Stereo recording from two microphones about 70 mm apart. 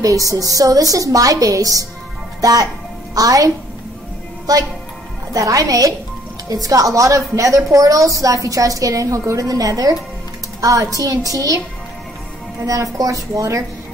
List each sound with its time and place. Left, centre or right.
0.0 s a woman's voice: right
5.3 s a woman's voice: right
12.6 s a woman's voice: right